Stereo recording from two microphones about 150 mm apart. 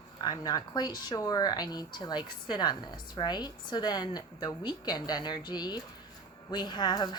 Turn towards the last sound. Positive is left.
turn(degrees=30)  # may be behind; listen again after turning